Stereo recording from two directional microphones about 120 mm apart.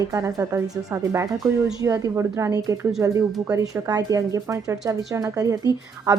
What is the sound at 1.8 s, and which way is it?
A woman's voice, 25° right (ahead or behind).